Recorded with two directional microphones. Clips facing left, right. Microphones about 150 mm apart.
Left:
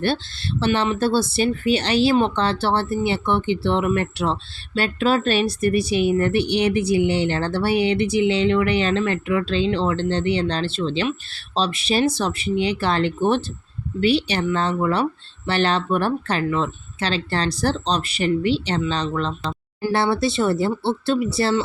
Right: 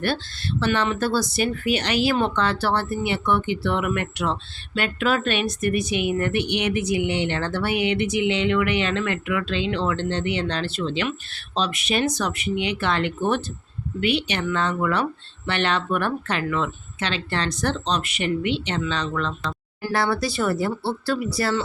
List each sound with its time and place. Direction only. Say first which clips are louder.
0.6 s speech: left 3 dB; 25° left (ahead or behind)